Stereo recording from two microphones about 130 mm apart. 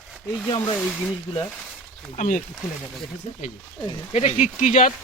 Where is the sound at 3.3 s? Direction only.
40° left (ahead or behind).